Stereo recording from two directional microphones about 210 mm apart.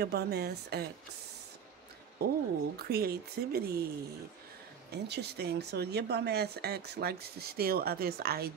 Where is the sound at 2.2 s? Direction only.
50° right (ahead or behind).